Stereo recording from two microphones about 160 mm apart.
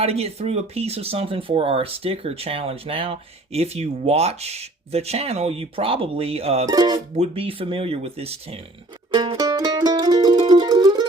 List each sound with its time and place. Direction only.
0.0 s speech: 40° right (ahead or behind)
6.7 s speech: 25° right (ahead or behind)
7.2 s speech: 35° right (ahead or behind)
9.1 s music: 30° right (ahead or behind)